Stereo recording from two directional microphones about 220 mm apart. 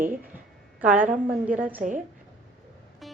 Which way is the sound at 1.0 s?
35° right (ahead or behind).